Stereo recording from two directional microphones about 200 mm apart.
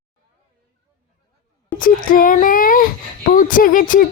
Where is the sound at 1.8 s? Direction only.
45° left (ahead or behind).